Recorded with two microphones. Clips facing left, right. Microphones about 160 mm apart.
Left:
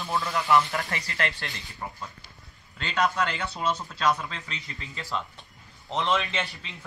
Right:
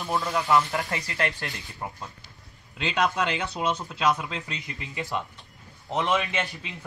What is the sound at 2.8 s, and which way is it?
Speech, 15° right (ahead or behind).